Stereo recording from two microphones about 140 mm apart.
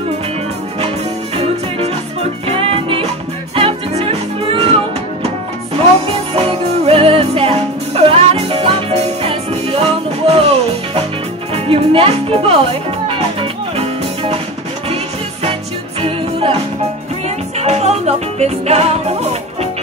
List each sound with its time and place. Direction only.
1.3 s music: 45° right (ahead or behind)
6.9 s music: 40° right (ahead or behind)
11.5 s music: 40° right (ahead or behind)
16.0 s music: 40° right (ahead or behind)
17.6 s music: 50° right (ahead or behind)